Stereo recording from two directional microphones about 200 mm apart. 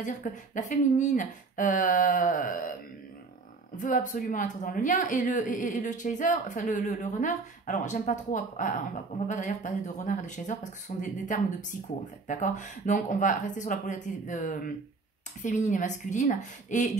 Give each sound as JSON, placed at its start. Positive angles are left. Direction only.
{"t": 0.0, "sound": "a woman's voice", "side_deg": 40}
{"t": 3.7, "sound": "a woman's voice", "side_deg": 40}